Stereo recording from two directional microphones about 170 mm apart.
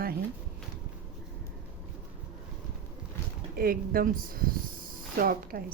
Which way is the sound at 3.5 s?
60° right (ahead or behind).